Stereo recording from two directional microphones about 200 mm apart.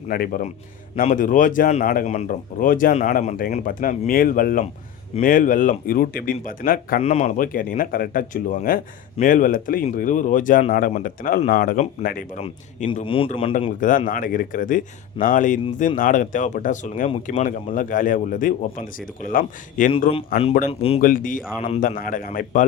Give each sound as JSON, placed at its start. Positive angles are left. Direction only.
{"t": 0.1, "sound": "speech", "side_deg": 45}
{"t": 12.9, "sound": "a man's voice", "side_deg": 25}
{"t": 13.7, "sound": "speech", "side_deg": 40}
{"t": 20.7, "sound": "a man's voice", "side_deg": 30}
{"t": 21.0, "sound": "speech", "side_deg": 45}